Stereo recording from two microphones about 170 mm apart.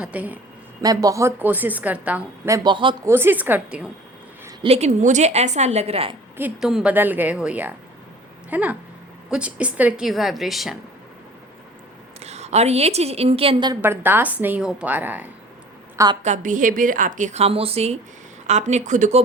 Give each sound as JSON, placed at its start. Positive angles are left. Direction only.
{"t": 0.0, "sound": "a woman's voice", "side_deg": -10}
{"t": 0.8, "sound": "a woman's voice", "side_deg": -20}
{"t": 2.6, "sound": "speech", "side_deg": -30}
{"t": 3.0, "sound": "a woman's voice", "side_deg": -15}
{"t": 4.6, "sound": "a woman's voice", "side_deg": -40}
{"t": 6.3, "sound": "a woman's voice", "side_deg": -5}
{"t": 12.2, "sound": "a woman's voice", "side_deg": -40}
{"t": 13.8, "sound": "a woman's voice", "side_deg": -15}
{"t": 16.2, "sound": "a woman's voice", "side_deg": -45}